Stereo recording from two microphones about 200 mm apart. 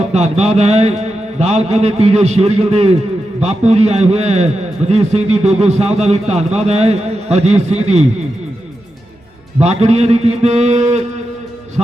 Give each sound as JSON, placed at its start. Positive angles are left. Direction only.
{"t": 0.1, "sound": "a man's voice", "side_deg": -35}
{"t": 9.6, "sound": "a man's voice", "side_deg": -35}